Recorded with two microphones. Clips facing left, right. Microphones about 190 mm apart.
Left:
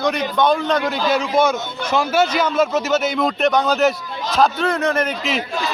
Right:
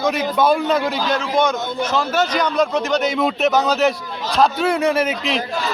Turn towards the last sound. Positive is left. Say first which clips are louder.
# right 2 dB
turn(degrees=-5)  # may be behind; listen again after turning